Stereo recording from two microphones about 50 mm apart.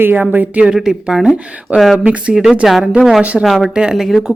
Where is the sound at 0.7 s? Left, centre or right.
Centre.